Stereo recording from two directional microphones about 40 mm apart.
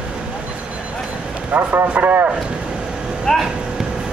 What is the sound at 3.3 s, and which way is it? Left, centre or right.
Vehicle, centre.